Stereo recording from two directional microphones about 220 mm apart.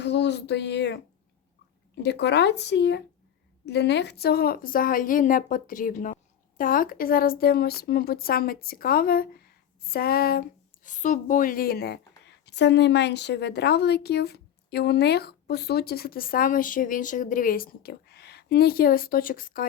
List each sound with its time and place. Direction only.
0.0 s a woman's voice: 50° left (ahead or behind)